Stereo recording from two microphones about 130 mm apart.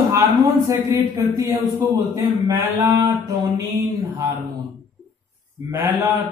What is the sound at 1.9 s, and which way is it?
A man's voice, 30° right (ahead or behind).